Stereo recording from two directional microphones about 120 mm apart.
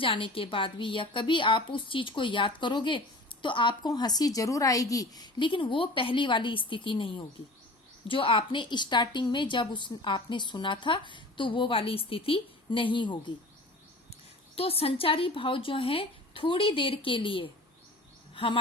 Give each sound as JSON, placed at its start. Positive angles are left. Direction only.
{"t": 0.0, "sound": "a woman's voice", "side_deg": 45}
{"t": 14.1, "sound": "speech", "side_deg": 55}